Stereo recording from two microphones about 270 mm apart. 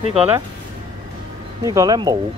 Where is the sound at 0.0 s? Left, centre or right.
Right.